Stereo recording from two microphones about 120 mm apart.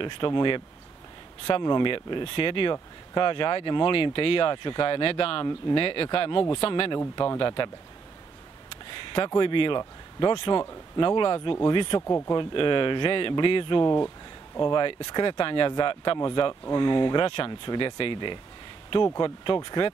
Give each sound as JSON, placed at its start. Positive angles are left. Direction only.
{"t": 0.0, "sound": "a man's voice", "side_deg": 40}
{"t": 12.1, "sound": "speech", "side_deg": 25}
{"t": 12.4, "sound": "speech", "side_deg": 45}